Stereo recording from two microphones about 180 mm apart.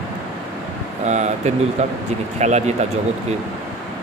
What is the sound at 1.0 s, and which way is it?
Speech, 40° right (ahead or behind).